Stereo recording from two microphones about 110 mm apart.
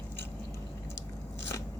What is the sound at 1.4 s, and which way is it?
Biting, 25° left (ahead or behind).